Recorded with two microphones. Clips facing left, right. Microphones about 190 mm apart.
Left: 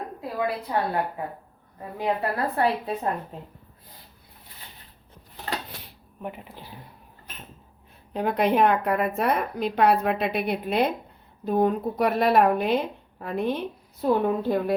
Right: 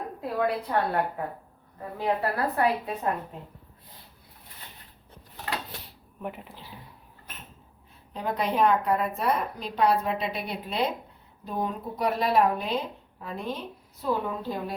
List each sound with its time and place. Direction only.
0.2 s a woman's voice: 5° left (ahead or behind)
2.0 s a woman's voice: 30° left (ahead or behind)
8.1 s speech: 60° left (ahead or behind)